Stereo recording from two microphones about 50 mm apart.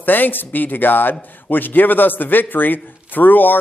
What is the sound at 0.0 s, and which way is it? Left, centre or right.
A man's voice, left.